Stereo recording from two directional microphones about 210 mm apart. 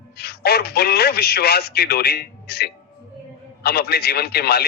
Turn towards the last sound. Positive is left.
turn(degrees=50)  # may be behind; listen again after turning